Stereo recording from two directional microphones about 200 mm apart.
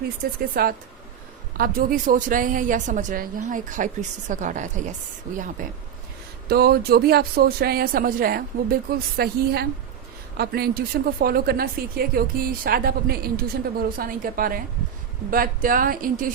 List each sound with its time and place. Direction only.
0.3 s a woman's voice: 50° right (ahead or behind)
6.5 s speech: 50° right (ahead or behind)